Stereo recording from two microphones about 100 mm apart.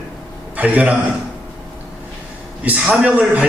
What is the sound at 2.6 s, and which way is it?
Speech, 10° right (ahead or behind).